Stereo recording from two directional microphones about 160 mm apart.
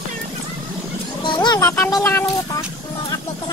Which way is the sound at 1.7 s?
15° left (ahead or behind).